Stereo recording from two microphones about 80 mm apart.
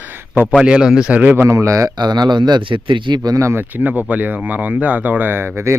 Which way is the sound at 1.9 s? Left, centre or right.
Right.